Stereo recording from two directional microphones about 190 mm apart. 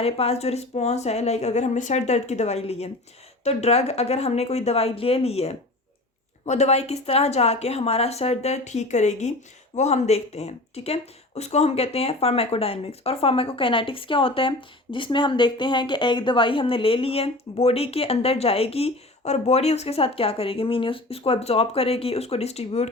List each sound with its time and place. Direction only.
0.0 s speech: 30° left (ahead or behind)